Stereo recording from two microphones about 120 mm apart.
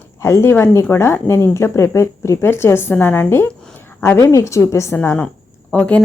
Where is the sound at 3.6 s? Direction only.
15° left (ahead or behind).